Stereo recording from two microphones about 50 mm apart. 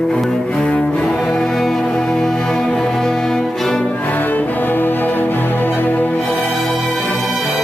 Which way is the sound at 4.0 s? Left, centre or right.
Left.